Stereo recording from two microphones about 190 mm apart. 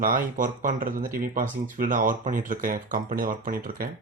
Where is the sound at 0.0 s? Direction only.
45° right (ahead or behind).